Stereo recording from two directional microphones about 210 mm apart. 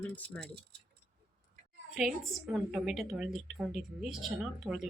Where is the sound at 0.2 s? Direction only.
5° left (ahead or behind).